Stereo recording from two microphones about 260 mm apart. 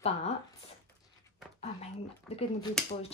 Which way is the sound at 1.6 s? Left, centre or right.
Left.